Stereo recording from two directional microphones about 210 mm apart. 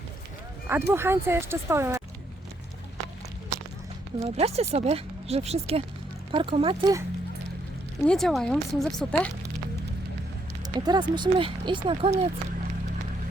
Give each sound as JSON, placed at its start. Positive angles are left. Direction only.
{"t": 0.7, "sound": "speech", "side_deg": -10}
{"t": 4.2, "sound": "speech", "side_deg": -30}
{"t": 8.0, "sound": "speech", "side_deg": 0}
{"t": 10.6, "sound": "speech", "side_deg": -20}